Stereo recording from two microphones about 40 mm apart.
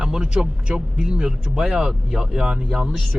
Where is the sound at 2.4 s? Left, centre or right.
Right.